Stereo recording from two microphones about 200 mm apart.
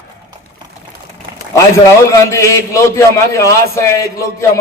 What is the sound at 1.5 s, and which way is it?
A man's voice, 15° left (ahead or behind).